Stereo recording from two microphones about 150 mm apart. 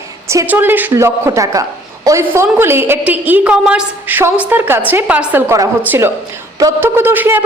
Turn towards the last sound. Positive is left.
turn(degrees=-15)  # may be behind; listen again after turning